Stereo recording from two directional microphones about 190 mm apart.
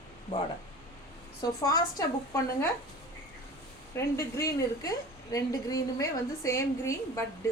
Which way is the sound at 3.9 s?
15° left (ahead or behind).